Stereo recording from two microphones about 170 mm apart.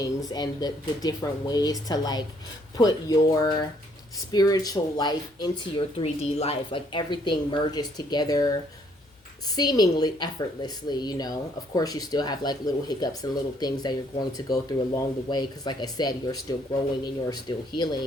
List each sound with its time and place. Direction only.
0.0 s speech: 20° left (ahead or behind)
9.6 s speech: 25° left (ahead or behind)